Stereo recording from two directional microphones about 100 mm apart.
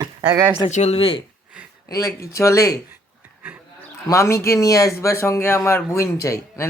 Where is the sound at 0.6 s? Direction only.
80° left.